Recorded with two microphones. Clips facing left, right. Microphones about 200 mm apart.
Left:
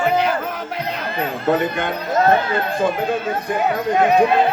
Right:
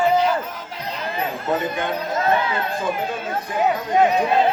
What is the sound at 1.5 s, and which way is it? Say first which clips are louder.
Speech: left 4 dB; 65° left (ahead or behind).